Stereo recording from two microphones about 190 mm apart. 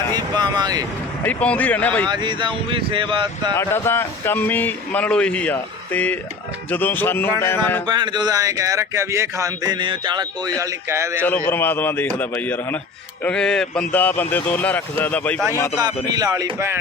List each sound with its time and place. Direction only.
0.1 s vehicle: 20° right (ahead or behind)
1.2 s speech: 10° left (ahead or behind)
2.0 s speech: 25° right (ahead or behind)
3.5 s speech: 10° left (ahead or behind)
7.9 s speech: 25° right (ahead or behind)
11.2 s speech: 10° left (ahead or behind)
15.8 s speech: 20° right (ahead or behind)